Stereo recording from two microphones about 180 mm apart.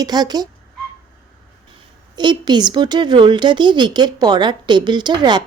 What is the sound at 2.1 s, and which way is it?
Speech, 25° right (ahead or behind).